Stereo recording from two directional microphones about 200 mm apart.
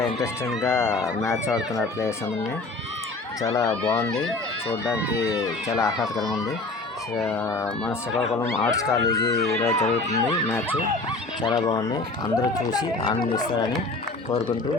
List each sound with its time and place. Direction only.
0.6 s speech: 15° left (ahead or behind)
3.5 s speech: 20° left (ahead or behind)
6.1 s speech: centre (ahead or behind)
7.2 s speech: 10° left (ahead or behind)
9.4 s speech: 30° left (ahead or behind)
11.4 s speech: 15° left (ahead or behind)